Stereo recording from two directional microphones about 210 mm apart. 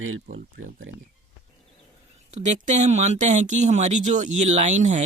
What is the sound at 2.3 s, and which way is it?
Speech, 35° right (ahead or behind).